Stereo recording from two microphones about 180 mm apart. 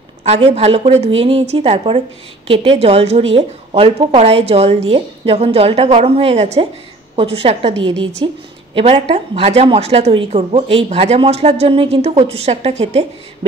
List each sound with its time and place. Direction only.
0.2 s a woman's voice: 35° right (ahead or behind)